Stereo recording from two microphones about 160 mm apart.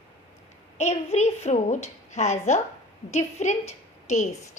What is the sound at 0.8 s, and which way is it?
A woman's voice, 45° left (ahead or behind).